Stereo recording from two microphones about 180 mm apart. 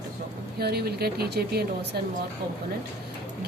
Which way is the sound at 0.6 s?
60° right (ahead or behind).